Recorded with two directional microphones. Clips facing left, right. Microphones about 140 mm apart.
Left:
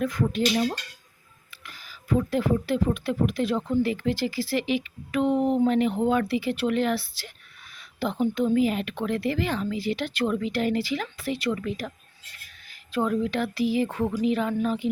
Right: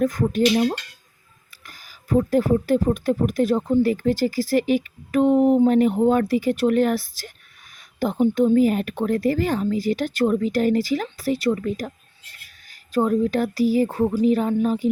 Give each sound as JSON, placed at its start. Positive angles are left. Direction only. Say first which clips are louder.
{"t": 0.0, "sound": "speech", "louder": "right 5 dB", "side_deg": -40}
{"t": 12.9, "sound": "speech", "louder": "right 5 dB", "side_deg": -40}